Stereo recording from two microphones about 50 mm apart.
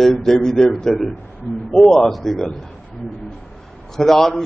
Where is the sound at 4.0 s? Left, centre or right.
Centre.